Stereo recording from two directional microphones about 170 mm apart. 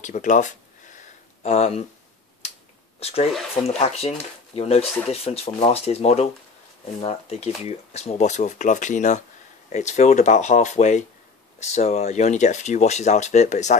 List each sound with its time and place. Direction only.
0.0 s a sound: 45° left (ahead or behind)
2.4 s finger snapping: 40° left (ahead or behind)
3.0 s speech: 35° left (ahead or behind)